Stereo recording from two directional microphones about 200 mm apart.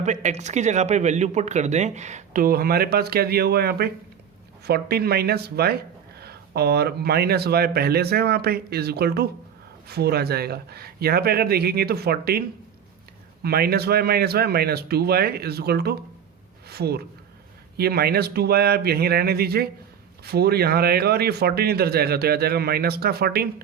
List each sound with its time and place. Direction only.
0.0 s speech: 35° right (ahead or behind)